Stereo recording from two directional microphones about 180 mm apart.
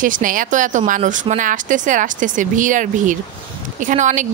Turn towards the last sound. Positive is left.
turn(degrees=-45)  # may be behind; listen again after turning